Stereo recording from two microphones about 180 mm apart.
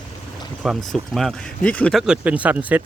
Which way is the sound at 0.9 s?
Centre (ahead or behind).